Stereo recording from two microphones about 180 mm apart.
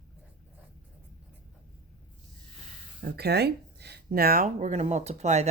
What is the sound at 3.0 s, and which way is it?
Speech, 60° right (ahead or behind).